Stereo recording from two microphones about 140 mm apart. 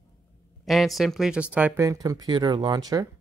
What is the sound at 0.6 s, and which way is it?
Speech, centre (ahead or behind).